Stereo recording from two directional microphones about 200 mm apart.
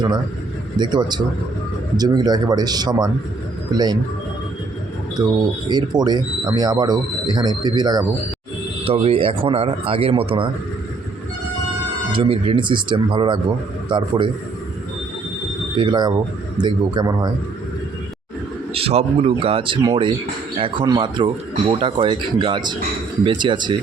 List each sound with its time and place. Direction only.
0.8 s speech: 20° right (ahead or behind)
5.6 s speech: 20° right (ahead or behind)
12.1 s speech: 25° right (ahead or behind)
15.8 s speech: 25° right (ahead or behind)
18.7 s speech: 30° right (ahead or behind)